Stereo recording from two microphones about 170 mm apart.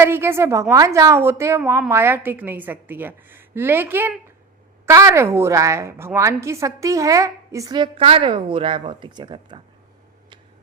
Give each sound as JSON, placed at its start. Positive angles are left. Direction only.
{"t": 0.0, "sound": "a woman's voice", "side_deg": -15}